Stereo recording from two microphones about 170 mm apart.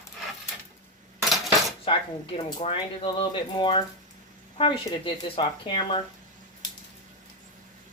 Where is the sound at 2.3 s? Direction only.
30° left (ahead or behind).